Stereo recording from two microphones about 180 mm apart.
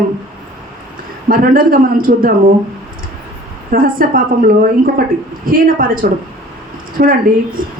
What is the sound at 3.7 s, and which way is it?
A woman's voice, 50° right (ahead or behind).